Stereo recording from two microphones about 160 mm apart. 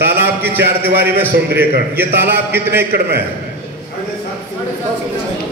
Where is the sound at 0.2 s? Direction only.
10° right (ahead or behind).